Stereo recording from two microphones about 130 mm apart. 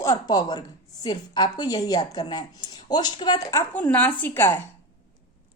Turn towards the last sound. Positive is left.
turn(degrees=15)  # may be behind; listen again after turning